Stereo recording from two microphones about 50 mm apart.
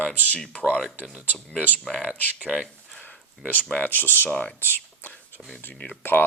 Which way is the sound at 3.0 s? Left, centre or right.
Left.